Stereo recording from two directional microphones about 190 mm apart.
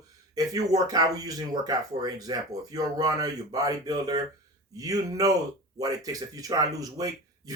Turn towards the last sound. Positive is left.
turn(degrees=-20)  # may be behind; listen again after turning